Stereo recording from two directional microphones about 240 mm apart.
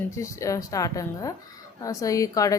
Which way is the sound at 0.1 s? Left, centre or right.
Centre.